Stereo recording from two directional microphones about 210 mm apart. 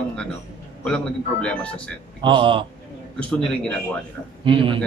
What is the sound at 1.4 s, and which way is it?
Speech, 5° left (ahead or behind).